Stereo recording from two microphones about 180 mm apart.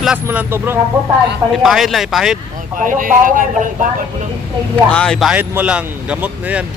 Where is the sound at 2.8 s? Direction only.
50° right (ahead or behind).